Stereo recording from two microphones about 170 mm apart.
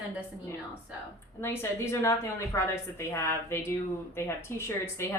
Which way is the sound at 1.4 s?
15° left (ahead or behind).